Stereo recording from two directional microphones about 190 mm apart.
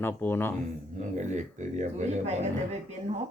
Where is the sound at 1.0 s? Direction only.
40° right (ahead or behind).